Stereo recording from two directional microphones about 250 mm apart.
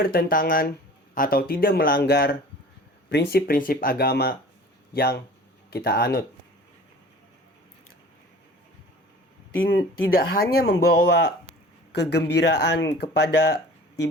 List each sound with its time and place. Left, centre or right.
0.0 s speech: left
9.6 s speech: left